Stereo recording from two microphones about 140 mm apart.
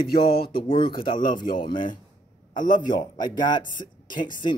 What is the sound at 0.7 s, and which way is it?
Speech, 35° left (ahead or behind).